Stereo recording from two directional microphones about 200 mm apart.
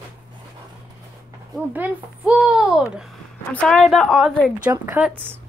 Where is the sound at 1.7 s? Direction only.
5° right (ahead or behind).